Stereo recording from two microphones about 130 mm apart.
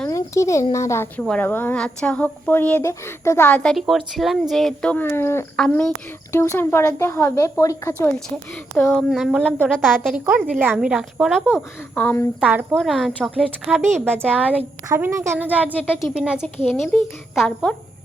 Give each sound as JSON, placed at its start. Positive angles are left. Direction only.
{"t": 0.1, "sound": "speech", "side_deg": 25}
{"t": 3.6, "sound": "speech", "side_deg": 0}
{"t": 5.5, "sound": "speech", "side_deg": 5}
{"t": 6.3, "sound": "speech", "side_deg": 20}
{"t": 8.9, "sound": "speech", "side_deg": 0}
{"t": 10.1, "sound": "a child's voice", "side_deg": -10}
{"t": 11.9, "sound": "speech", "side_deg": 15}
{"t": 12.4, "sound": "a child's voice", "side_deg": -10}
{"t": 12.7, "sound": "speech", "side_deg": 0}
{"t": 14.1, "sound": "speech", "side_deg": 5}
{"t": 14.8, "sound": "a child's voice", "side_deg": -20}